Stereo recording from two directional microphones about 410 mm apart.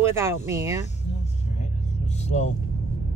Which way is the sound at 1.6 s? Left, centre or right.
Centre.